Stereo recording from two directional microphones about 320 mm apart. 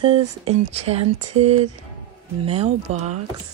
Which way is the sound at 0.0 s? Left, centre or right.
Centre.